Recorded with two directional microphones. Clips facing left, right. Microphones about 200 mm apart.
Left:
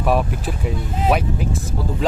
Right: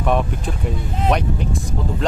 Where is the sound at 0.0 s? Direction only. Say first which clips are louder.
Left 1 dB; 5° left (ahead or behind).